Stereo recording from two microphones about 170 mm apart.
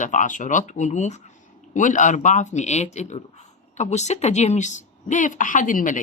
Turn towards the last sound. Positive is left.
turn(degrees=50)  # may be behind; listen again after turning